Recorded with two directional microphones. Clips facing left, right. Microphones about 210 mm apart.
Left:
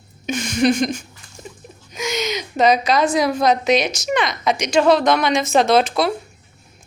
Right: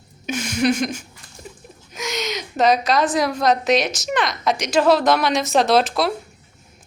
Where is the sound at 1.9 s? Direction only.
Centre (ahead or behind).